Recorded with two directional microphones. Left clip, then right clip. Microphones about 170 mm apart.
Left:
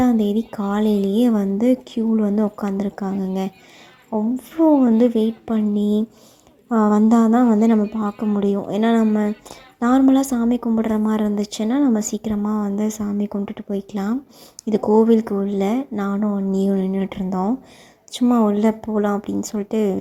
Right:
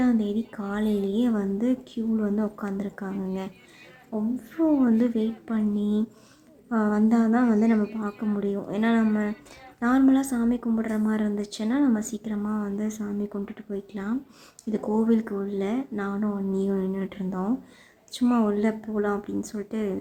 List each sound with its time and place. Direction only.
0.0 s a woman's voice: 30° left (ahead or behind)
4.1 s a woman's voice: 20° left (ahead or behind)